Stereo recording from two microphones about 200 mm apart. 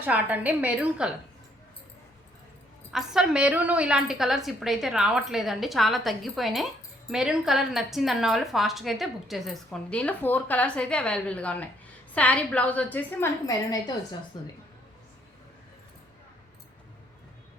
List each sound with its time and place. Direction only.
0.0 s a woman's voice: 10° right (ahead or behind)
2.9 s a woman's voice: 5° right (ahead or behind); by 14.5 s 20° left (ahead or behind)